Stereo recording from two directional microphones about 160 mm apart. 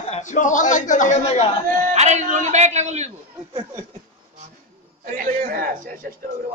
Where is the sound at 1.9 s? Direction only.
45° right (ahead or behind).